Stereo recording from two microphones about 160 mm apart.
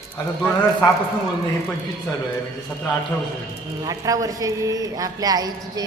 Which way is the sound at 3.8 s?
20° right (ahead or behind).